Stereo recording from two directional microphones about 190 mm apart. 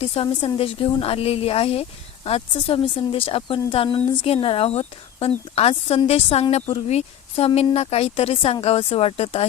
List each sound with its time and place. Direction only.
0.0 s a woman's voice: 30° left (ahead or behind)